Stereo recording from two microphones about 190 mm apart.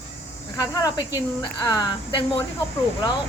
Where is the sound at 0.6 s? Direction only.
20° left (ahead or behind).